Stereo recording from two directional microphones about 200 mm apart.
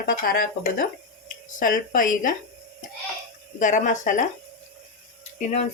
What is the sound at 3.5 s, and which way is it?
Speech, 40° left (ahead or behind).